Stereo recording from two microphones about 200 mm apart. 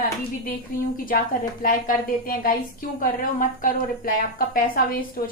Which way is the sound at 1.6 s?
45° left (ahead or behind).